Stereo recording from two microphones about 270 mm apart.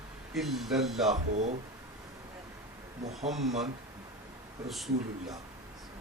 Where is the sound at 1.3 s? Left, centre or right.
Right.